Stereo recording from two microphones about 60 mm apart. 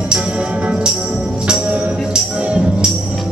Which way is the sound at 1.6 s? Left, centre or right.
Right.